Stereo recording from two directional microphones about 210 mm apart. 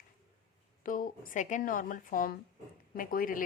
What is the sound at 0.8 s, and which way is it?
A woman's voice, 40° left (ahead or behind).